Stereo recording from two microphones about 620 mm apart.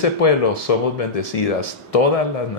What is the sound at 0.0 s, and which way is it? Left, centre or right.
Speech, left.